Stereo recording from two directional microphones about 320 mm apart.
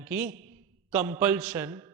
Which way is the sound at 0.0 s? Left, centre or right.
Centre.